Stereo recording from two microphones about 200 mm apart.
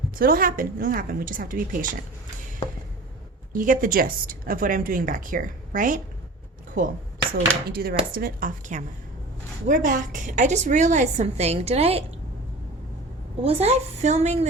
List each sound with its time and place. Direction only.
0.2 s a woman's voice: 45° right (ahead or behind)
3.5 s a woman's voice: 40° right (ahead or behind)
13.4 s a woman's voice: 30° right (ahead or behind)